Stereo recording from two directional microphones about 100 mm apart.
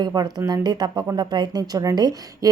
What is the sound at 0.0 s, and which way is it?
Speech, 40° right (ahead or behind).